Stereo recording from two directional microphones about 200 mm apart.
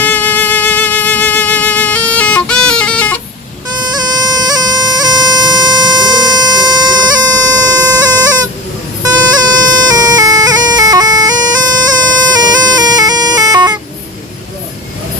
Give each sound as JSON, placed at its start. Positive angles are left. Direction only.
{"t": 0.0, "sound": "music", "side_deg": 10}
{"t": 3.7, "sound": "bagpipes", "side_deg": -20}
{"t": 9.0, "sound": "music", "side_deg": -20}
{"t": 9.9, "sound": "bagpipes", "side_deg": -20}
{"t": 12.4, "sound": "music", "side_deg": -20}